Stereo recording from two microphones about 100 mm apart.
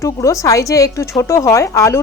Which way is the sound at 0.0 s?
30° left (ahead or behind).